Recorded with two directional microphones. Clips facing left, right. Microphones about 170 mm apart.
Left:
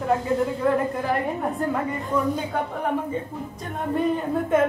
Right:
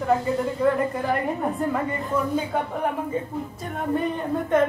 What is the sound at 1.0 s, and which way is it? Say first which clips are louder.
Speech: even; centre (ahead or behind).